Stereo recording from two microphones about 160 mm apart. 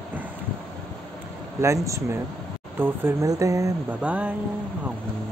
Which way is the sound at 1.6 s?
20° right (ahead or behind).